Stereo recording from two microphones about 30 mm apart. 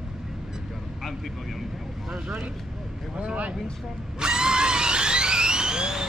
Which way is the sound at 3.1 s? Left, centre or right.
Right.